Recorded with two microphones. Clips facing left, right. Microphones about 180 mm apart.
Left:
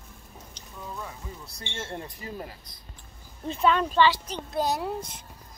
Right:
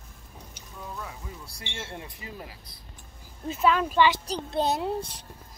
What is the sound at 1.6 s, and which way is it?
Speech, 10° right (ahead or behind).